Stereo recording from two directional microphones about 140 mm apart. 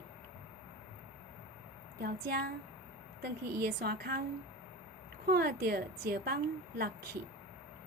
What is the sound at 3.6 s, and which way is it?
Speech, 90° right.